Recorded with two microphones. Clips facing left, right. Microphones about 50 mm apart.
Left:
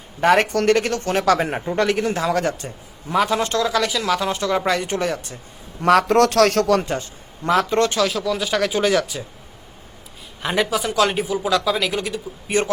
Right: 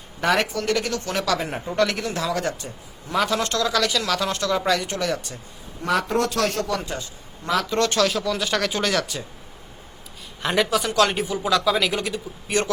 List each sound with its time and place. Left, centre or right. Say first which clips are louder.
0.2 s speech: left 5 dB; left
0.4 s speech: left 6 dB; left
3.2 s speech: left 3 dB; left
4.5 s speech: left 1 dB; left
5.8 s a man's voice: left 7 dB; left
7.4 s speech: left 4 dB; left
7.9 s a man's voice: left 1 dB; centre
10.4 s a man's voice: left 1 dB; centre
12.5 s a man's voice: left 2 dB; left